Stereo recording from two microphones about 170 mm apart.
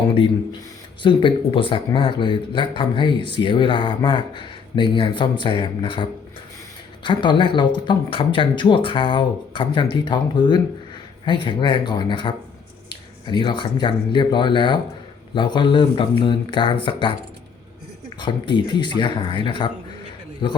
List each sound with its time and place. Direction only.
1.0 s speech: 30° left (ahead or behind)
18.2 s speech: 25° left (ahead or behind)